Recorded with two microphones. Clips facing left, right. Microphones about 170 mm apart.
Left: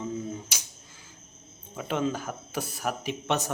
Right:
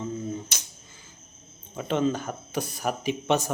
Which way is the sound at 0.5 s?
10° left (ahead or behind).